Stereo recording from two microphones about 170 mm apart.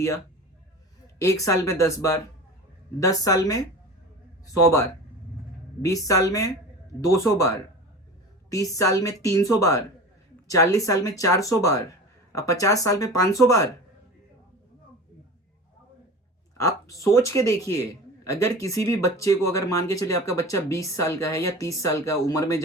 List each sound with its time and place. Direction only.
1.2 s speech: 20° left (ahead or behind)
16.6 s speech: 20° left (ahead or behind)